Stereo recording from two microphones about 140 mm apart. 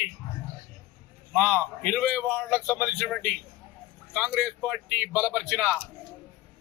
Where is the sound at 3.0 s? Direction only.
5° left (ahead or behind).